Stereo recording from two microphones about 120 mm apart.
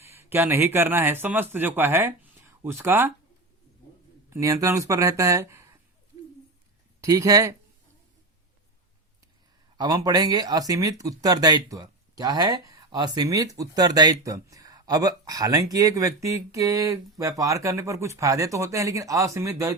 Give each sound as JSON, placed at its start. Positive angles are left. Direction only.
{"t": 0.0, "sound": "a man's voice", "side_deg": -20}
{"t": 4.3, "sound": "speech", "side_deg": -25}
{"t": 7.0, "sound": "speech", "side_deg": -30}
{"t": 9.7, "sound": "speech", "side_deg": -35}